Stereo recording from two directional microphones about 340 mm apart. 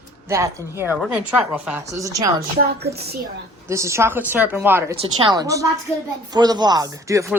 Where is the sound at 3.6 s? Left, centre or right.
Centre.